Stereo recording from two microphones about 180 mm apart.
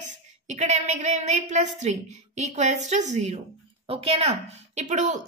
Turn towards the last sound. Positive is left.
turn(degrees=-45)  # may be behind; listen again after turning